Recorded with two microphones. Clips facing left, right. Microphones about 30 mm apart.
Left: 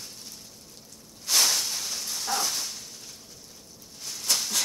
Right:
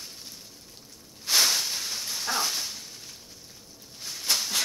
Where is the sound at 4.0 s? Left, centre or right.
Centre.